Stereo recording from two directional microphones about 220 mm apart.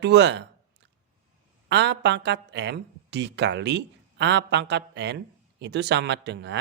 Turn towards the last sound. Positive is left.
turn(degrees=-50)  # may be behind; listen again after turning